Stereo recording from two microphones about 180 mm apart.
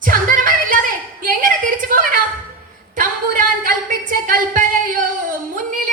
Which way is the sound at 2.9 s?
50° right (ahead or behind).